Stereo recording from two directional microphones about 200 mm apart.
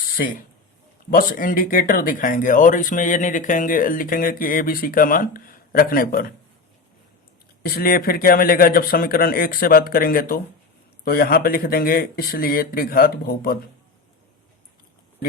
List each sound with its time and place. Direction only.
1.1 s speech: 45° left (ahead or behind)
7.6 s speech: 50° left (ahead or behind)